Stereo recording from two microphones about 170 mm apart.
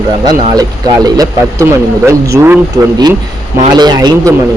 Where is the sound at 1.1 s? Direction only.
20° right (ahead or behind).